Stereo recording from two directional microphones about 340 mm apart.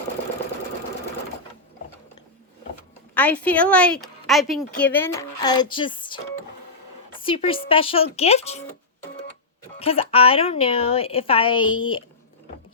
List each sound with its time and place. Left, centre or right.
3.2 s speech: centre
7.2 s a woman's voice: centre
9.7 s a woman's voice: centre
11.6 s speech: left